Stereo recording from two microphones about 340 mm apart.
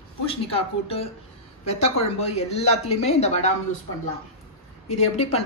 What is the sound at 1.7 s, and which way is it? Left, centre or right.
Speech, centre.